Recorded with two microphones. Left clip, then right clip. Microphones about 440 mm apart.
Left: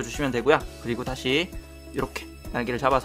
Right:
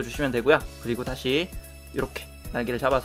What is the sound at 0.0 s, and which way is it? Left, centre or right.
Speech, centre.